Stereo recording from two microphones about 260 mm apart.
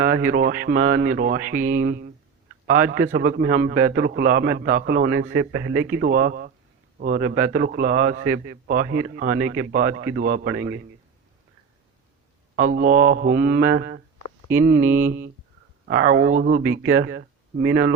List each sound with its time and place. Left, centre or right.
0.3 s a man's voice: right
0.8 s speech: right
1.1 s a man's voice: right
5.5 s speech: right
6.0 s a man's voice: right
10.4 s speech: right
12.5 s a man's voice: right
14.8 s mantra: centre
15.9 s speech: right
16.2 s a man's voice: right